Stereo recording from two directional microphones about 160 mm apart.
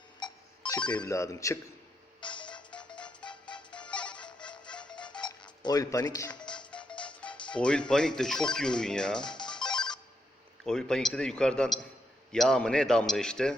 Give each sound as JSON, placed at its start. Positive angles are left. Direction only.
{"t": 0.2, "sound": "ringtone", "side_deg": 30}
{"t": 0.9, "sound": "speech", "side_deg": 20}
{"t": 2.2, "sound": "music", "side_deg": 30}
{"t": 5.6, "sound": "speech", "side_deg": 25}
{"t": 6.7, "sound": "music", "side_deg": 5}
{"t": 7.5, "sound": "a man's voice", "side_deg": 5}
{"t": 10.6, "sound": "a man's voice", "side_deg": 5}